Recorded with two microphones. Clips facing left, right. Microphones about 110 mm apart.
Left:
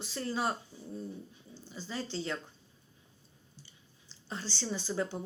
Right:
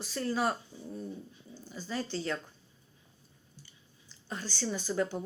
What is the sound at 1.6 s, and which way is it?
Speech, 25° left (ahead or behind).